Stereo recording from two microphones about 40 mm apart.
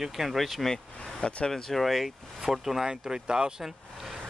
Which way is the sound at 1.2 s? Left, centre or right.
Left.